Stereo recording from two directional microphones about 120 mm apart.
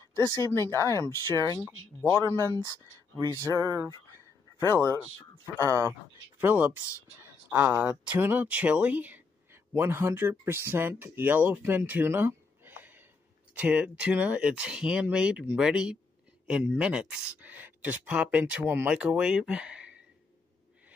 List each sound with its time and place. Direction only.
0.2 s speech: 25° left (ahead or behind)
2.3 s speech: 25° right (ahead or behind)
4.6 s speech: 20° left (ahead or behind)
5.6 s speech: 25° right (ahead or behind); by 19.9 s 5° right (ahead or behind)